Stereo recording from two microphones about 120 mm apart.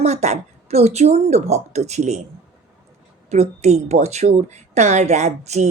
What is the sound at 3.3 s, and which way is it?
A woman's voice, 65° right (ahead or behind).